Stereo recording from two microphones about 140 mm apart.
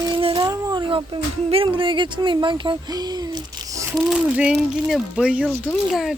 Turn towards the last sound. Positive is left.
turn(degrees=0)  # may be behind; listen again after turning